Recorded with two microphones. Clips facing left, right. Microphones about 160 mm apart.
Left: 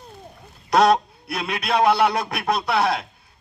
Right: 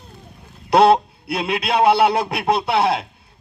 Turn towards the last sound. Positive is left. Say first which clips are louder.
# right 3 dB
turn(degrees=-25)  # may be behind; listen again after turning